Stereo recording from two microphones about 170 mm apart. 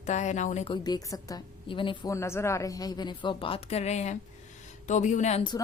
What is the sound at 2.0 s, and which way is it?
A woman's voice, 15° left (ahead or behind).